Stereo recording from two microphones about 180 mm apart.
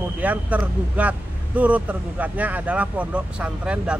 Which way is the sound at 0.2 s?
10° right (ahead or behind).